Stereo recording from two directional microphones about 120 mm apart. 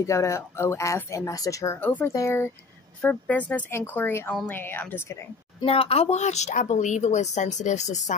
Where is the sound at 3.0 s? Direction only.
15° left (ahead or behind).